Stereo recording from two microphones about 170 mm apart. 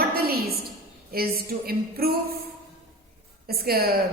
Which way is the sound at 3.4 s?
60° right (ahead or behind).